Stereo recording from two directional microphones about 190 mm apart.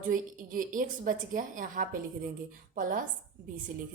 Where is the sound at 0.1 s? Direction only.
45° right (ahead or behind).